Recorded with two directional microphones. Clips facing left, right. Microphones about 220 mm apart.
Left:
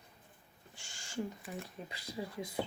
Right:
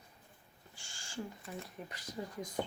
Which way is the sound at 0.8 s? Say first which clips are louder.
Left 3 dB; 20° left (ahead or behind).